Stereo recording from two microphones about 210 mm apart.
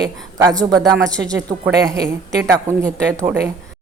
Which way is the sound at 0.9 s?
5° left (ahead or behind).